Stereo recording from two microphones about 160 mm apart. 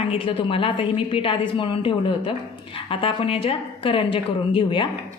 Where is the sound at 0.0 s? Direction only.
35° left (ahead or behind).